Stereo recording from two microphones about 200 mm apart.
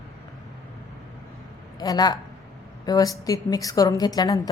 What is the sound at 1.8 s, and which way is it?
A woman's voice, 20° left (ahead or behind).